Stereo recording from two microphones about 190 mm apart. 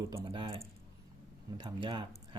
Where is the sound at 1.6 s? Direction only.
25° right (ahead or behind).